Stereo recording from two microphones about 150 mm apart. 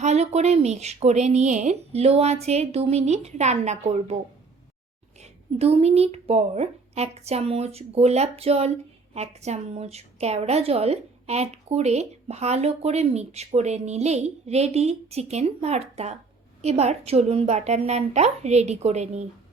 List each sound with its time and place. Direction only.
0.0 s a woman's voice: 50° right (ahead or behind)
5.5 s a woman's voice: 45° right (ahead or behind)